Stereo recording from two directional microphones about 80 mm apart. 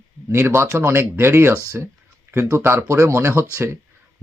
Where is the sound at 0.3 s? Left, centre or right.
Right.